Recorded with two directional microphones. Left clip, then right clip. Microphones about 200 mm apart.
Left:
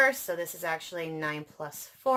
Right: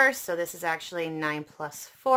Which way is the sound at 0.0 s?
30° right (ahead or behind).